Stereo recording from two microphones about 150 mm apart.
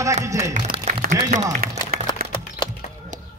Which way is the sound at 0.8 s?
55° right (ahead or behind).